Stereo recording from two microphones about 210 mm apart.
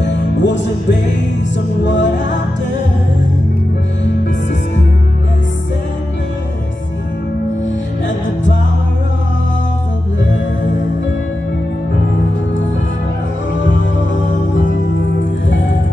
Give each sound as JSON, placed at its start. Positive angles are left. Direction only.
{"t": 0.0, "sound": "music", "side_deg": 60}
{"t": 1.9, "sound": "music", "side_deg": 60}